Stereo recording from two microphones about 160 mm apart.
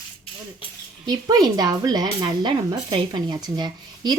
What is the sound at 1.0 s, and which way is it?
Speech, 25° right (ahead or behind).